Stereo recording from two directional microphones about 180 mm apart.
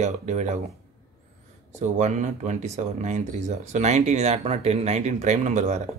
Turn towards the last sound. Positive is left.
turn(degrees=-40)  # may be behind; listen again after turning